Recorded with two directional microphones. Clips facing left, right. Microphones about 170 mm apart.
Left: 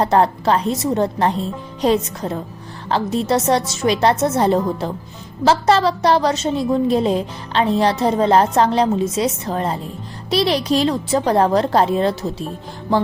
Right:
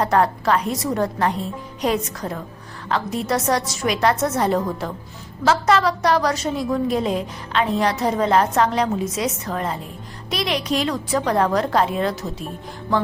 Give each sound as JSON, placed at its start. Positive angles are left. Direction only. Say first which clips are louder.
{"t": 0.0, "sound": "a woman's voice", "louder": "left 3 dB", "side_deg": 30}